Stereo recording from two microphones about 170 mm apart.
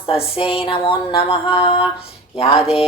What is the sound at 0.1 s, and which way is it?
A woman's voice, 35° left (ahead or behind).